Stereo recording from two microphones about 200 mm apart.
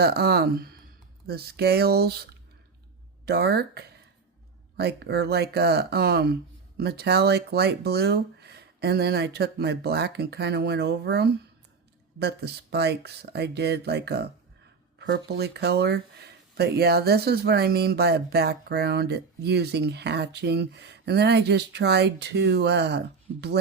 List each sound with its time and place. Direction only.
0.0 s speech: 50° right (ahead or behind)
3.2 s speech: 55° right (ahead or behind)